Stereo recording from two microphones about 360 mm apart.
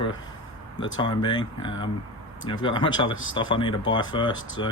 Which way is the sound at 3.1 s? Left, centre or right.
Left.